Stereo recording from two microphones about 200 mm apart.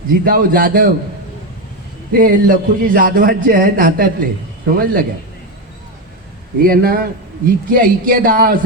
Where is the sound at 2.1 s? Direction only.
45° right (ahead or behind).